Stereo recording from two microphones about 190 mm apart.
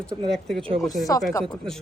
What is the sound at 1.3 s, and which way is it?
Speech, 20° left (ahead or behind).